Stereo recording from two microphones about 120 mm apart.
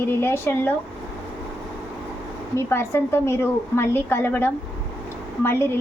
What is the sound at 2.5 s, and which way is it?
A woman's voice, 20° left (ahead or behind).